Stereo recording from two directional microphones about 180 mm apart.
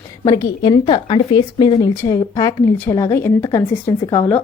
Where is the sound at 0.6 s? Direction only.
25° left (ahead or behind).